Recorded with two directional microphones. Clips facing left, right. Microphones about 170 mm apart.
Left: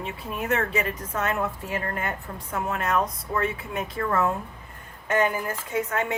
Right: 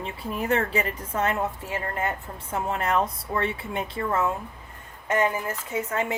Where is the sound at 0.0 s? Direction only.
35° right (ahead or behind).